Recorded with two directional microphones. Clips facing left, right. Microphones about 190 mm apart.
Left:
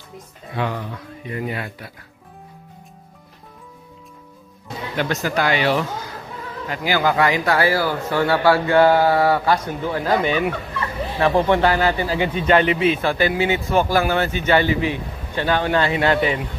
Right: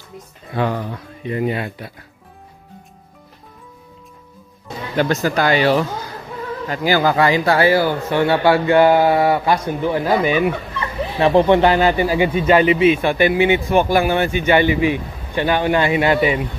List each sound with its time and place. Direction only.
0.6 s speech: 40° right (ahead or behind)
1.2 s speech: 25° right (ahead or behind)
4.9 s a man's voice: 35° right (ahead or behind); by 10.5 s 5° right (ahead or behind)
11.1 s a man's voice: 20° right (ahead or behind)